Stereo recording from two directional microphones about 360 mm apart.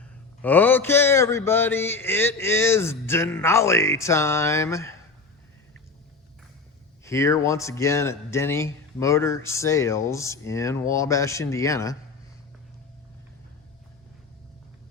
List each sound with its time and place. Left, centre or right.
0.4 s speech: centre
7.0 s speech: centre